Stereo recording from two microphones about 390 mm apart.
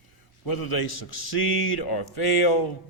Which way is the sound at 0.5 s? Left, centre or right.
Left.